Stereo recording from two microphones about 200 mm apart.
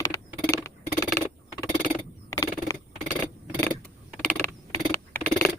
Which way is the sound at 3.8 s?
5° left (ahead or behind).